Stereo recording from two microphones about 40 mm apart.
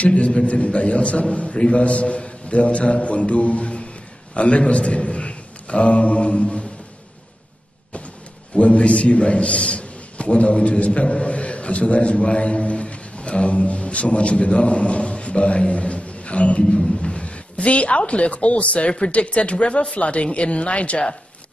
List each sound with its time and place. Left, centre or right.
0.0 s a man's voice: left
8.5 s a man's voice: left
16.7 s a sound: left
17.2 s speech: left